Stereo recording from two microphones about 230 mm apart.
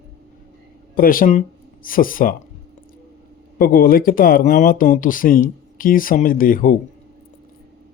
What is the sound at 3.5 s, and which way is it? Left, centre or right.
Speech, left.